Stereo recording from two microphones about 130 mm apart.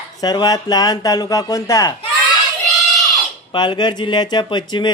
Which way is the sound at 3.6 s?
35° left (ahead or behind).